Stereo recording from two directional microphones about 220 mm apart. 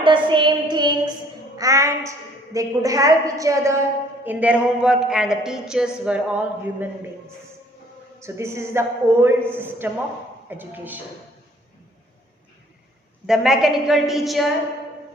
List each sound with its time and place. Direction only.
0.0 s a sound: 20° right (ahead or behind)
1.5 s a woman's voice: 15° right (ahead or behind)
8.2 s a woman's voice: 10° right (ahead or behind)
13.2 s speech: centre (ahead or behind)